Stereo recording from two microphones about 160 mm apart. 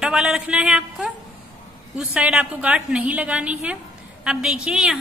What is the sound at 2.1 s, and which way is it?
A woman's voice, 5° right (ahead or behind).